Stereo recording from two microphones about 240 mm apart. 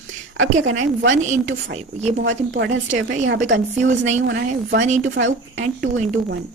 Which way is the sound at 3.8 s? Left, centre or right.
Right.